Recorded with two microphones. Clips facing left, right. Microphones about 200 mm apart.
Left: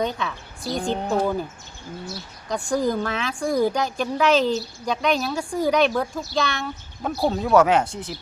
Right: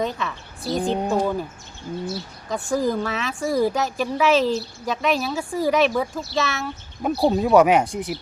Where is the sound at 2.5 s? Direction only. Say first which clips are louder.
Even; centre (ahead or behind).